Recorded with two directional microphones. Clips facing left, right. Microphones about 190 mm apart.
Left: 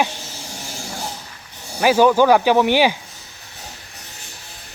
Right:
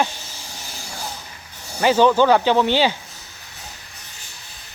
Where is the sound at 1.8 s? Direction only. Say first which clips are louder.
Left 1 dB; 10° left (ahead or behind).